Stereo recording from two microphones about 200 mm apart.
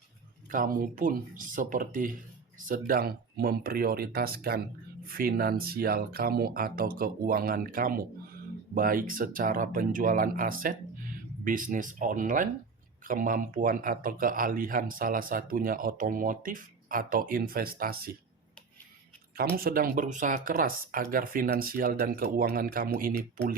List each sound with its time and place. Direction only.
0.4 s speech: 45° right (ahead or behind)
19.5 s speech: 45° right (ahead or behind)